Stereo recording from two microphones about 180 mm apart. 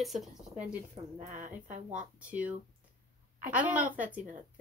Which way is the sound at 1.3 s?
45° right (ahead or behind).